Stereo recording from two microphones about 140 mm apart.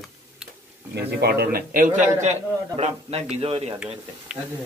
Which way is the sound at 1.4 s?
80° right.